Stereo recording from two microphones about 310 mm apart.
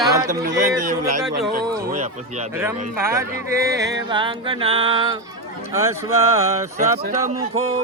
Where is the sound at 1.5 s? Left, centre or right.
Right.